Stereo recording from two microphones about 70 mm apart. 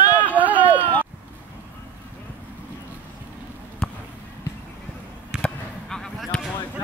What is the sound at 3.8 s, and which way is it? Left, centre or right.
Basketball bounce, centre.